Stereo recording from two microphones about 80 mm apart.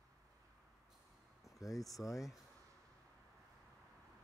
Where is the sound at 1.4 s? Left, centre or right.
Left.